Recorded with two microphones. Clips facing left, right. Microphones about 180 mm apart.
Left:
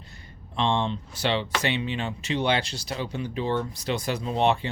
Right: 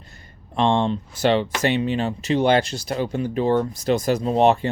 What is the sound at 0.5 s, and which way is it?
Speech, 50° right (ahead or behind).